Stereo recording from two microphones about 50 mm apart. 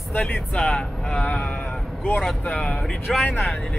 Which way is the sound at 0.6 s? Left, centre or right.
Centre.